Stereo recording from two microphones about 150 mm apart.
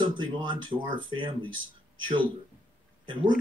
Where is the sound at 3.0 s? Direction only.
30° right (ahead or behind).